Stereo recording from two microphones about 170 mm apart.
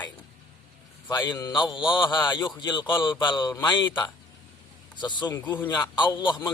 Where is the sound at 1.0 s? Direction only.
25° left (ahead or behind).